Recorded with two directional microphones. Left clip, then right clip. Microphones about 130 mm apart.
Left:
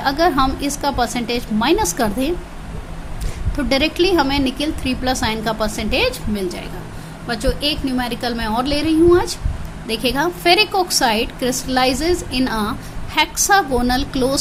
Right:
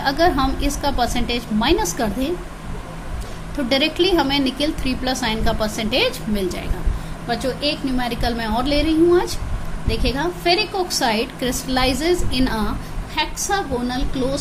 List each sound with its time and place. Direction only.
0.0 s a woman's voice: 25° left (ahead or behind)
3.5 s a woman's voice: 25° left (ahead or behind); by 6.7 s 10° left (ahead or behind)
7.3 s a woman's voice: 25° left (ahead or behind)
13.1 s a woman's voice: 50° left (ahead or behind)